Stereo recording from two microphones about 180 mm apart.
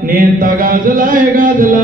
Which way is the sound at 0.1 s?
50° right (ahead or behind).